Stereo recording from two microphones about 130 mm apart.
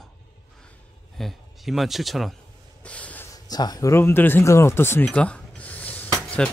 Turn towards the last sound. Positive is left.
turn(degrees=10)  # may be behind; listen again after turning